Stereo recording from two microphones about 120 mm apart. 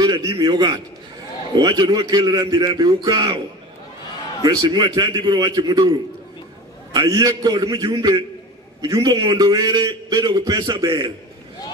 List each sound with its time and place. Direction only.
0.0 s a man's voice: 35° right (ahead or behind)